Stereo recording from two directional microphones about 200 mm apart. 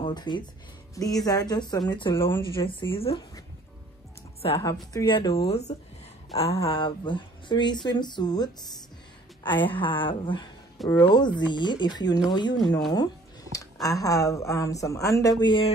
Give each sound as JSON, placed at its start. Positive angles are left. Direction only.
{"t": 0.0, "sound": "speech", "side_deg": 20}
{"t": 4.4, "sound": "speech", "side_deg": 30}